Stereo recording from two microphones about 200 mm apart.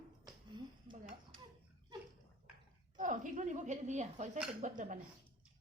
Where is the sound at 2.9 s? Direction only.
40° right (ahead or behind).